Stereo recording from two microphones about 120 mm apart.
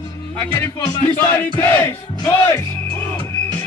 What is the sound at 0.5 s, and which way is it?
Battle cry, 20° left (ahead or behind).